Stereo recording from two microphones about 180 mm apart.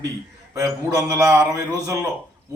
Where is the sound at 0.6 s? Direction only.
15° right (ahead or behind).